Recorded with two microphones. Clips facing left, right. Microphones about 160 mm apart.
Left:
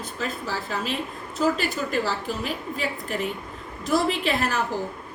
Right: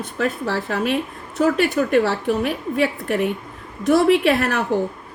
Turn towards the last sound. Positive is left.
turn(degrees=-65)  # may be behind; listen again after turning